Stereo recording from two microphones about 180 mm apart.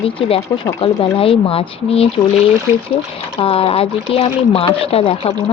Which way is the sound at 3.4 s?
30° left (ahead or behind).